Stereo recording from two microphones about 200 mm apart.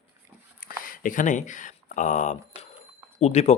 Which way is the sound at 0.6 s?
45° left (ahead or behind).